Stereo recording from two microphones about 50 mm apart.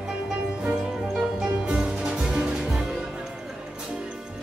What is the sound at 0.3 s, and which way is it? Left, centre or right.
Music, right.